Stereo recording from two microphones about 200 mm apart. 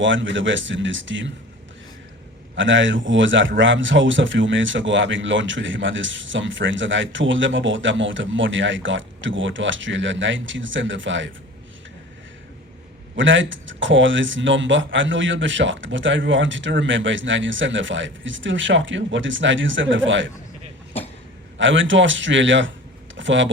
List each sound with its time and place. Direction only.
0.0 s a man's voice: 70° right (ahead or behind)
2.6 s a man's voice: 70° right (ahead or behind)
13.1 s a man's voice: 70° right (ahead or behind)
21.6 s a man's voice: 70° right (ahead or behind)
23.1 s a sound: 70° right (ahead or behind)